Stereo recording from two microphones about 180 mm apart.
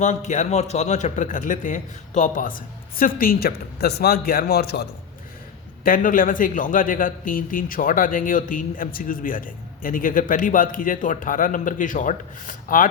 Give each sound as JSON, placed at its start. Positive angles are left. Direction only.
{"t": 0.0, "sound": "a man's voice", "side_deg": 40}
{"t": 5.8, "sound": "a man's voice", "side_deg": 50}